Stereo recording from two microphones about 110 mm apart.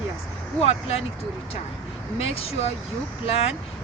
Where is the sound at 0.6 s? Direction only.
65° left (ahead or behind).